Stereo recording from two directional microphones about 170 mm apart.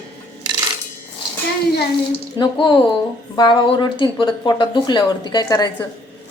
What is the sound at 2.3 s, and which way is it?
A woman's voice, 25° left (ahead or behind).